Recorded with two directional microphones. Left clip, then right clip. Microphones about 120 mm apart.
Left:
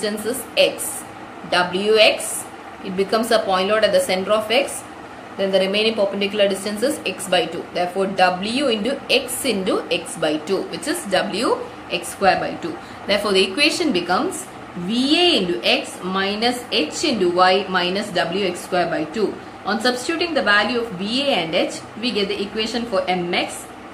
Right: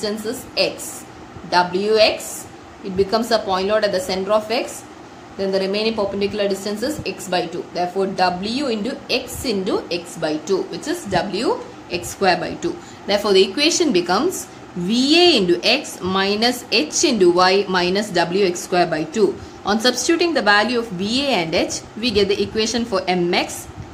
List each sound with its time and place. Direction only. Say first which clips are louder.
1.5 s a woman's voice: right 1 dB; 25° right (ahead or behind)
11.9 s a woman's voice: left 1 dB; 40° right (ahead or behind)